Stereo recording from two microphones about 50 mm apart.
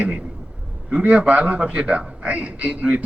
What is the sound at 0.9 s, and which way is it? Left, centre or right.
A man's voice, right.